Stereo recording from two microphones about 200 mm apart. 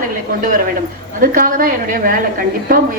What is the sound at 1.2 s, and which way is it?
Speech, 45° right (ahead or behind).